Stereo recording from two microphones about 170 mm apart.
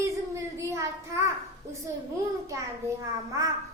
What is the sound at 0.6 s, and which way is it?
Speech, 15° right (ahead or behind).